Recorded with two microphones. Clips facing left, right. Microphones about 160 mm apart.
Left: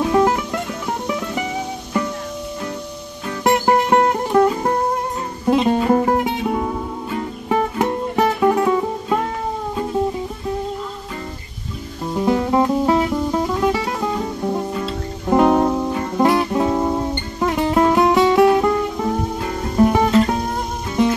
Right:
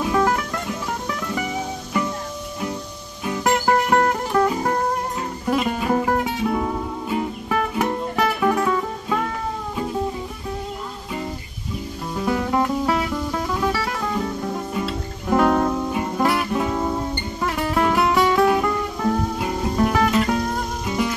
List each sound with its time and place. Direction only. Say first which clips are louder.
0.1 s music: left 2 dB; 20° left (ahead or behind)
3.4 s music: left 3 dB; 20° left (ahead or behind)
7.4 s music: left 6 dB; 25° left (ahead or behind)
12.1 s music: left 5 dB; 20° left (ahead or behind)